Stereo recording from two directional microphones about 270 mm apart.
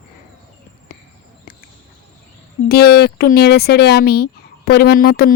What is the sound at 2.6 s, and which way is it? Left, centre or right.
Speech, left.